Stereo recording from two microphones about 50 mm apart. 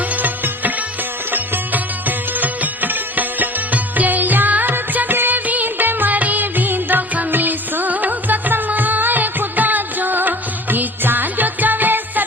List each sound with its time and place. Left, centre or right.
0.0 s music: right